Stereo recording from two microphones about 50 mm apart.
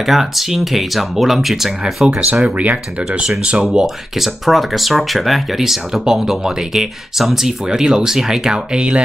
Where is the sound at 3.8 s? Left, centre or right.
Centre.